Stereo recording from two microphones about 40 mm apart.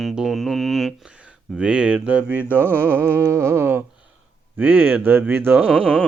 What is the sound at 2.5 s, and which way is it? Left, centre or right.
Music, right.